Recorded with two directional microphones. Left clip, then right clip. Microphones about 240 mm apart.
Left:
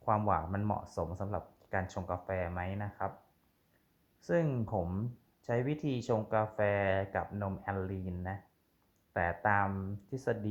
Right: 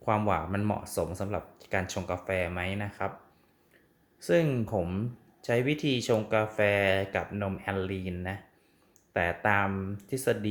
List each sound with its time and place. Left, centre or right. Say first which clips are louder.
0.0 s speech: right 3 dB; centre
4.4 s speech: right 5 dB; centre
6.0 s speech: right 3 dB; right